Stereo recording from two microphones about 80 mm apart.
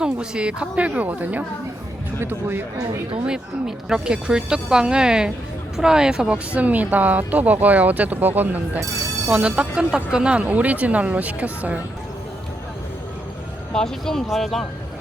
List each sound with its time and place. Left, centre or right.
0.0 s speech: centre; by 2.6 s right
3.2 s speech: centre
9.3 s speech: centre
13.7 s speech: centre